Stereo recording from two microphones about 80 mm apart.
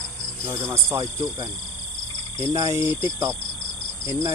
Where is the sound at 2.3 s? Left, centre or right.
Right.